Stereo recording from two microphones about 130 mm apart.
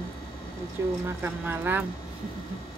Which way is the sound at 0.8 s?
15° right (ahead or behind).